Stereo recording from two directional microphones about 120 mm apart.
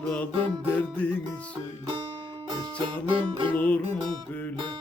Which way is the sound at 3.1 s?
45° right (ahead or behind).